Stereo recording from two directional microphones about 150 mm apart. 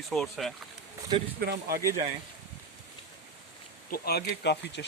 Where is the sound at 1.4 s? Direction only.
90° right.